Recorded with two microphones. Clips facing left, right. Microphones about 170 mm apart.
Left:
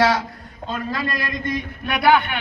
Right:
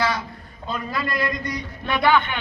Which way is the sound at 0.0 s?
90° left.